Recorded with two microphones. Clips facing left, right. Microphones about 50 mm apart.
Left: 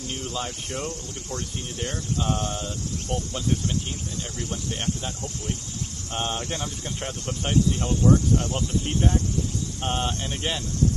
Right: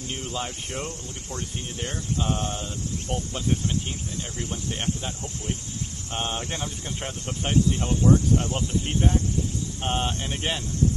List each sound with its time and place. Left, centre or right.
0.2 s speech: centre